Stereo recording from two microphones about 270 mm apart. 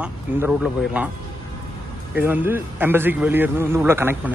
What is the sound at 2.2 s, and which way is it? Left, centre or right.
Speech, centre.